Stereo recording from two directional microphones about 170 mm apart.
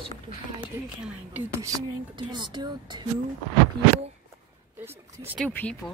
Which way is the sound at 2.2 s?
25° right (ahead or behind).